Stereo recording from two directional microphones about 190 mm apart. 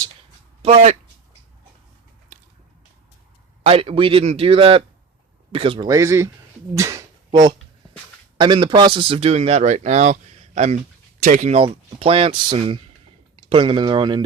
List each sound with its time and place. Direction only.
0.6 s speech: 30° right (ahead or behind)
3.6 s a man's voice: 30° right (ahead or behind)
5.9 s speech: 15° right (ahead or behind)
8.4 s a man's voice: 25° right (ahead or behind)